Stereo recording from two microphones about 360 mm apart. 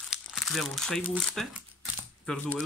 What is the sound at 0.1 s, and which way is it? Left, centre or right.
Speech, centre.